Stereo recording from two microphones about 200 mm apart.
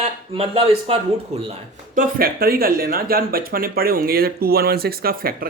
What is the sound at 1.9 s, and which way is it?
Speech, 50° right (ahead or behind).